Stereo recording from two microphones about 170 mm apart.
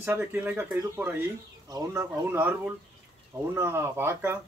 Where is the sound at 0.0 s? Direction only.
10° right (ahead or behind).